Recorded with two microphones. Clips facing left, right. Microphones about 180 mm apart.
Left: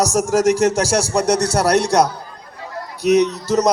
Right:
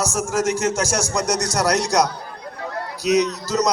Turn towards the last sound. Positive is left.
turn(degrees=30)  # may be behind; listen again after turning